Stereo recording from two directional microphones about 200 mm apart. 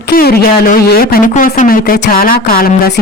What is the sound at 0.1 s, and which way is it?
Speech, 50° left (ahead or behind).